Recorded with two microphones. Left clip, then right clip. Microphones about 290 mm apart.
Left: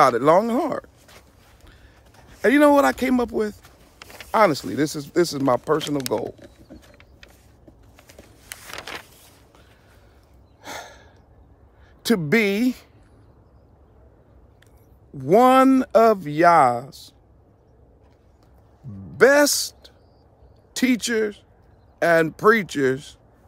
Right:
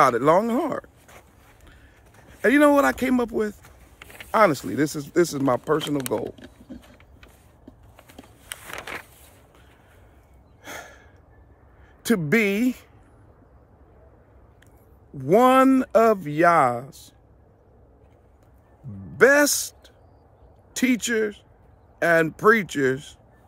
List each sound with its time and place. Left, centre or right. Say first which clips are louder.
0.0 s speech: left 2 dB; centre
1.7 s a sound: left 1 dB; centre
4.0 s a sound: left 1 dB; centre
4.3 s speech: left 1 dB; centre
7.9 s a sound: even; centre
10.6 s gasp: left 3 dB; centre
12.0 s speech: left 1 dB; centre
15.1 s speech: left 2 dB; centre
19.1 s speech: left 1 dB; centre